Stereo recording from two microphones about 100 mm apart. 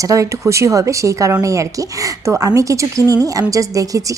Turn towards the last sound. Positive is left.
turn(degrees=-35)  # may be behind; listen again after turning